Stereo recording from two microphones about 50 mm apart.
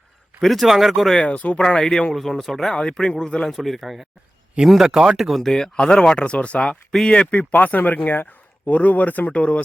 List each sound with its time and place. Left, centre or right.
0.4 s speech: centre
1.2 s speech: left
1.6 s speech: centre
2.7 s speech: centre
3.5 s speech: centre
5.4 s a man's voice: centre